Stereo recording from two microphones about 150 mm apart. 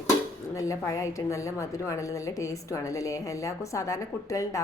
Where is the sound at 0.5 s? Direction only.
20° left (ahead or behind).